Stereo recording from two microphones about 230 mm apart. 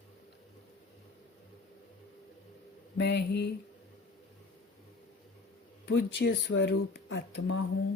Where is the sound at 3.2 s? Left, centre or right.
Left.